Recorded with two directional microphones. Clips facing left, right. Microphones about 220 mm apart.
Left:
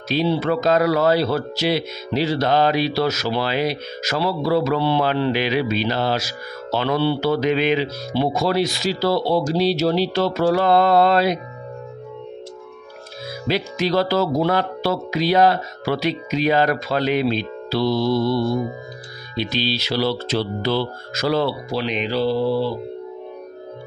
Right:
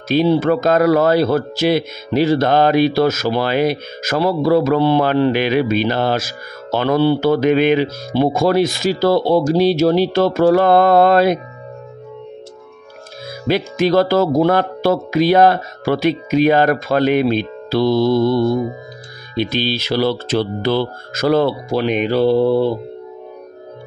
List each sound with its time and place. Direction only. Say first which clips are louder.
0.1 s speech: right 6 dB; 50° right (ahead or behind)
13.5 s speech: right 5 dB; 50° right (ahead or behind)